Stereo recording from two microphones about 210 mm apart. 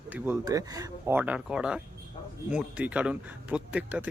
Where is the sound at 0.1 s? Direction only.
15° right (ahead or behind).